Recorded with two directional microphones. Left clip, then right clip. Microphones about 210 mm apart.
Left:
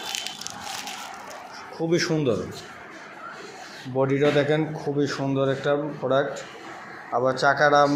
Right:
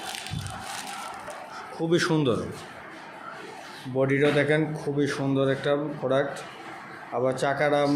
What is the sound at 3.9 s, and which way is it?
Speech, 5° left (ahead or behind).